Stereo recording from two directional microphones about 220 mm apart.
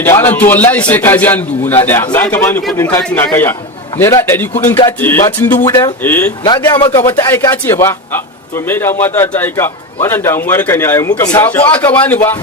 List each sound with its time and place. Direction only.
0.0 s a man's voice: 10° left (ahead or behind)